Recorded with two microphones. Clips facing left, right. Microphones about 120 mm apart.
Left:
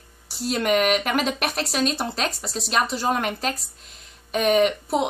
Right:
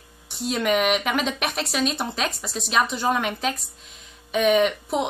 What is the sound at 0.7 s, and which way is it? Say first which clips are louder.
Speech: left 1 dB; centre (ahead or behind).